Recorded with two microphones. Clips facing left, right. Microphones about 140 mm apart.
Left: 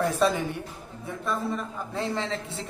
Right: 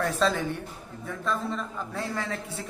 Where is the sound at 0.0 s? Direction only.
15° left (ahead or behind).